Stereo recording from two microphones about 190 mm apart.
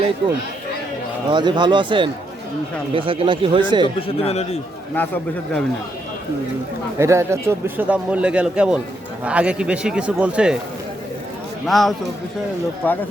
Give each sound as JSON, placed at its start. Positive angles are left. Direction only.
{"t": 1.3, "sound": "speech", "side_deg": -25}
{"t": 4.0, "sound": "a man's voice", "side_deg": 30}
{"t": 4.9, "sound": "a man's voice", "side_deg": 10}
{"t": 7.0, "sound": "a man's voice", "side_deg": -15}
{"t": 11.6, "sound": "a man's voice", "side_deg": 0}